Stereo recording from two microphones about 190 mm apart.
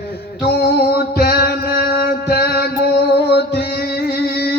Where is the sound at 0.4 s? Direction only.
55° left (ahead or behind).